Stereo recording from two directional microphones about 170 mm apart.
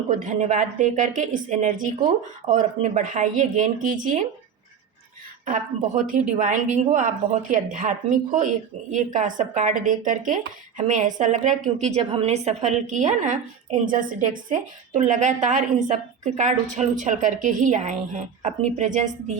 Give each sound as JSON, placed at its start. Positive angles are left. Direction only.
{"t": 0.1, "sound": "a woman's voice", "side_deg": -45}
{"t": 5.5, "sound": "a woman's voice", "side_deg": -50}